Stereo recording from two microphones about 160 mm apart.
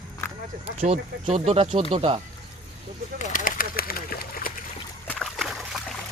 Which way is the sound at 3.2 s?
55° left (ahead or behind).